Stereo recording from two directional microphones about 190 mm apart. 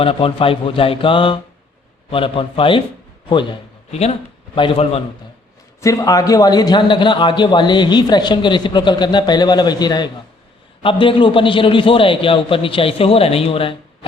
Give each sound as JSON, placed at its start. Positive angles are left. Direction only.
{"t": 0.0, "sound": "a man's voice", "side_deg": 30}
{"t": 4.5, "sound": "a man's voice", "side_deg": 25}
{"t": 5.8, "sound": "a man's voice", "side_deg": 15}